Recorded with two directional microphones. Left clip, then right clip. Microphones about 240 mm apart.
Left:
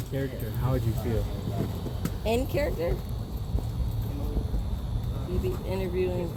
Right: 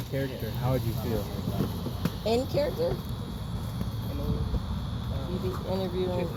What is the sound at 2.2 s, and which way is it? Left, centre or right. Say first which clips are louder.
Speech: right 1 dB; centre.